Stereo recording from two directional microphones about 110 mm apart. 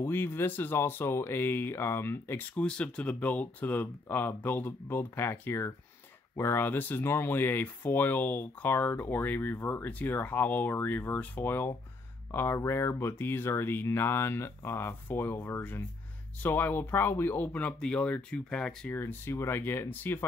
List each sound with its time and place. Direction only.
0.0 s speech: 20° left (ahead or behind)
18.9 s speech: 20° left (ahead or behind)